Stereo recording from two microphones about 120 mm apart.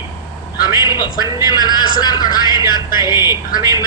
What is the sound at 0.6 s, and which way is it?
Speech, 35° left (ahead or behind).